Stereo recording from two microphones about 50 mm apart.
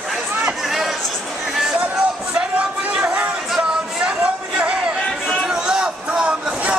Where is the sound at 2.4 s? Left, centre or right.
Right.